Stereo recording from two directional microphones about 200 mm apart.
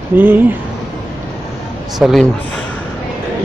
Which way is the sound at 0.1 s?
10° right (ahead or behind).